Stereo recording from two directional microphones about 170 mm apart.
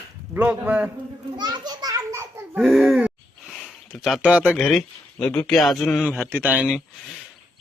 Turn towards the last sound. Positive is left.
turn(degrees=-5)  # may be behind; listen again after turning